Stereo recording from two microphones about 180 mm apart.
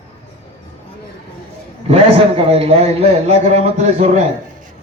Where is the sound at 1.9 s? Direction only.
35° right (ahead or behind).